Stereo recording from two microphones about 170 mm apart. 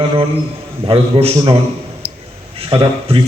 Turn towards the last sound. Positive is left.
turn(degrees=-30)  # may be behind; listen again after turning